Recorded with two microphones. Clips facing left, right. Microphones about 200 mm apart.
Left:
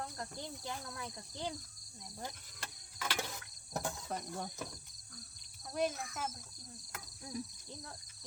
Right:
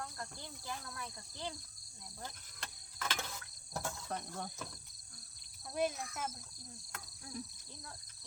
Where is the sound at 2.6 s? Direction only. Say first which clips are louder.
Even; 10° left (ahead or behind).